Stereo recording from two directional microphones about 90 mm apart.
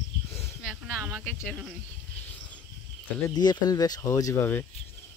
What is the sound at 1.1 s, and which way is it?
Speech, 5° left (ahead or behind).